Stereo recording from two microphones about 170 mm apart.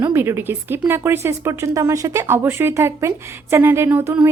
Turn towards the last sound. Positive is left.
turn(degrees=-15)  # may be behind; listen again after turning